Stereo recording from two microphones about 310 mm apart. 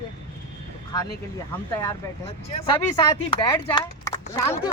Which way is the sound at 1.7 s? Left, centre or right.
Centre.